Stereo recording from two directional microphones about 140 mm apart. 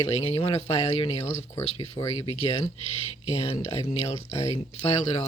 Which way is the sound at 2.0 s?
45° left (ahead or behind).